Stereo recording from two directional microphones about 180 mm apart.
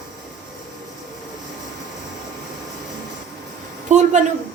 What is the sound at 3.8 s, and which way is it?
Speech, 40° right (ahead or behind).